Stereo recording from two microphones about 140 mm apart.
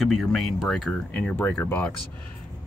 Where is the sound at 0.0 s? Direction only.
Centre (ahead or behind).